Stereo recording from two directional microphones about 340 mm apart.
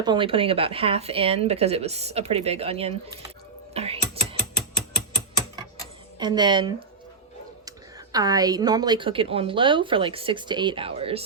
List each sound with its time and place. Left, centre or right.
0.0 s a woman's voice: centre
3.8 s typing: centre
6.1 s a woman's voice: centre